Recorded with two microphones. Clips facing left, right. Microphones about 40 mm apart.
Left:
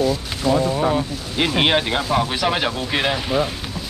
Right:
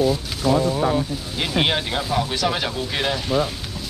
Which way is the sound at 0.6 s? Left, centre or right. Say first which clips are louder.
Left 1 dB; centre.